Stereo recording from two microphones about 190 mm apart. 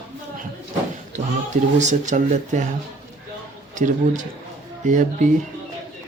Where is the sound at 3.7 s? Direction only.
40° right (ahead or behind).